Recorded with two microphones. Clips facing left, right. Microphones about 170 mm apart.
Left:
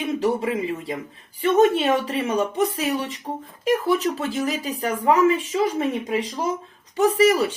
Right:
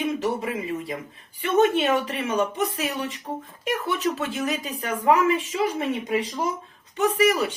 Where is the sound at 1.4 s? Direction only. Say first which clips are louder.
Left 3 dB; 35° left (ahead or behind).